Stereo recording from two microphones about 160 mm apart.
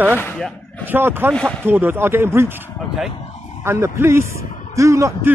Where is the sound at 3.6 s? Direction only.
15° right (ahead or behind).